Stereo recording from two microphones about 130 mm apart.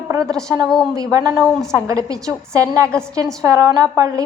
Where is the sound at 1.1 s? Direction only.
30° right (ahead or behind).